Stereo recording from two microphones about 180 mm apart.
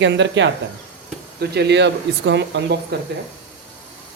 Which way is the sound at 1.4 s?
70° right (ahead or behind).